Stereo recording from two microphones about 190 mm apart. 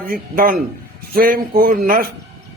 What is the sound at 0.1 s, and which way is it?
A man's voice, 45° right (ahead or behind).